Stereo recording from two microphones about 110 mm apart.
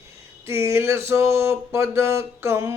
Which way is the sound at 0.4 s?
25° right (ahead or behind).